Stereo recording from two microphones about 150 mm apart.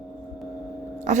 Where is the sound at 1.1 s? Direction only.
55° right (ahead or behind).